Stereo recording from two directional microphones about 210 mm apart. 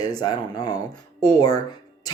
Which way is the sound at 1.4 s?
20° left (ahead or behind).